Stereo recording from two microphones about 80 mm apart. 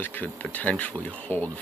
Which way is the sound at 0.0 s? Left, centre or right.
Left.